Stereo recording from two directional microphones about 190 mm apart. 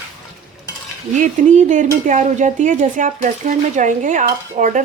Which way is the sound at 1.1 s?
40° right (ahead or behind).